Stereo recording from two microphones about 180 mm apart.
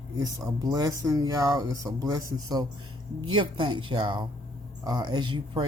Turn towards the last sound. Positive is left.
turn(degrees=-25)  # may be behind; listen again after turning